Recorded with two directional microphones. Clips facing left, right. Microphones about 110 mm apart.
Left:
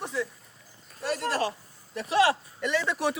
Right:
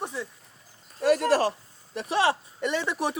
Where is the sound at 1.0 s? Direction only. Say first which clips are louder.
Right 7 dB; 50° right (ahead or behind).